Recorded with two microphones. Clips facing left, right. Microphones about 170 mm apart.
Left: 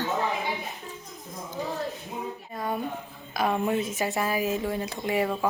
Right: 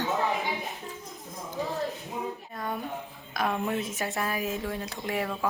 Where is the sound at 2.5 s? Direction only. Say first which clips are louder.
Left 6 dB; 5° left (ahead or behind).